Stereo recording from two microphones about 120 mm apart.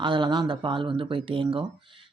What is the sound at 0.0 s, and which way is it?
Speech, 40° right (ahead or behind).